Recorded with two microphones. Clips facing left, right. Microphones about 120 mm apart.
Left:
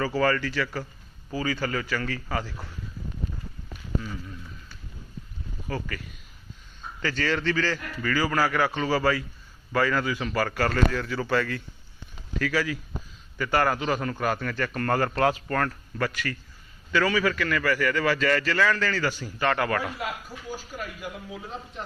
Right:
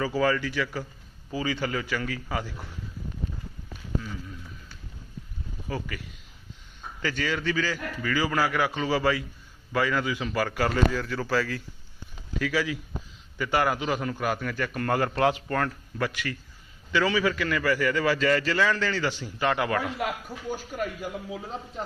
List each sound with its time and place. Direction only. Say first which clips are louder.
0.0 s a man's voice: left 1 dB; 10° right (ahead or behind)
5.6 s a man's voice: left 1 dB; 10° right (ahead or behind)
7.0 s a man's voice: left 2 dB; 10° right (ahead or behind)
11.0 s speech: left 1 dB; centre (ahead or behind)
12.4 s a man's voice: left 1 dB; 15° right (ahead or behind)
20.0 s speech: right 3 dB; 55° right (ahead or behind)